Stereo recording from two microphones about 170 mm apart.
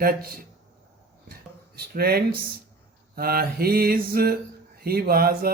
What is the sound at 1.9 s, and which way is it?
Speech, 65° right (ahead or behind).